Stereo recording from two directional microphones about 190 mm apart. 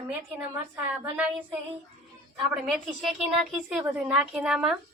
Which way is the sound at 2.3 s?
Centre (ahead or behind).